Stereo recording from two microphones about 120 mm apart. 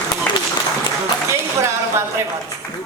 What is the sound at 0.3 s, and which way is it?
Applause, 10° left (ahead or behind).